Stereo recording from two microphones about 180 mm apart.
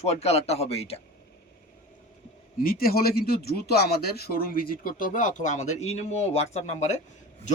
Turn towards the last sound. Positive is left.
turn(degrees=40)  # may be behind; listen again after turning